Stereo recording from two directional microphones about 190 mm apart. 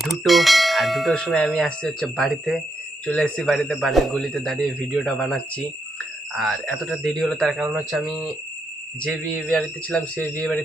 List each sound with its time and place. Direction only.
0.0 s speech: centre (ahead or behind)